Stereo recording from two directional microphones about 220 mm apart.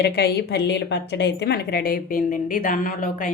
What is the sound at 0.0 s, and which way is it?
A woman's voice, 45° left (ahead or behind).